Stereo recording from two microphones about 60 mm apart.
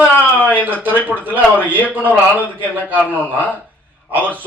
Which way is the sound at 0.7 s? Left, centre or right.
Right.